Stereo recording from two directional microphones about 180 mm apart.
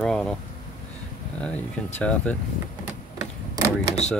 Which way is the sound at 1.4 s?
5° left (ahead or behind).